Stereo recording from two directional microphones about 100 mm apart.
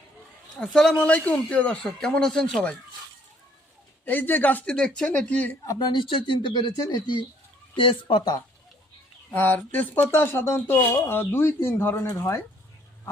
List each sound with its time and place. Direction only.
0.6 s speech: 5° left (ahead or behind)
4.0 s speech: 20° left (ahead or behind)
5.6 s speech: 45° left (ahead or behind)
7.8 s speech: 60° left (ahead or behind)
9.3 s speech: 20° left (ahead or behind)